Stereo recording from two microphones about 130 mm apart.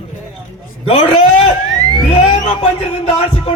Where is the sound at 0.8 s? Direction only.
50° left (ahead or behind).